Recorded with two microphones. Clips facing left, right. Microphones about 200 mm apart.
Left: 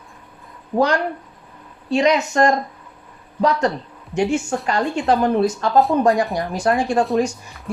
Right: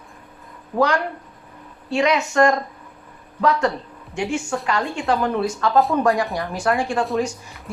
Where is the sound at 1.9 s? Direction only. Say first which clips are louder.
Left 2 dB; 35° left (ahead or behind).